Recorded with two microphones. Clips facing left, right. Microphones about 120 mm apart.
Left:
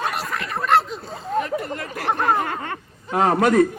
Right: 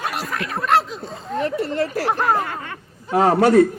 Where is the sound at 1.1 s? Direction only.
30° right (ahead or behind).